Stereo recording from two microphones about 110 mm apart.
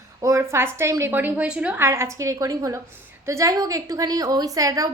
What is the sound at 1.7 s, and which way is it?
A woman's voice, 25° right (ahead or behind).